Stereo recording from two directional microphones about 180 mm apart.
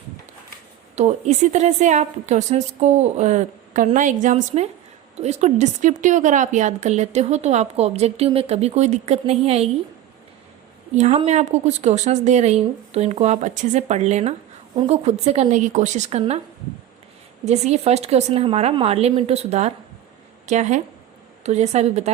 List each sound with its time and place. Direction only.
0.9 s a woman's voice: 40° right (ahead or behind)
10.9 s a woman's voice: 40° right (ahead or behind)
17.4 s a woman's voice: 40° right (ahead or behind)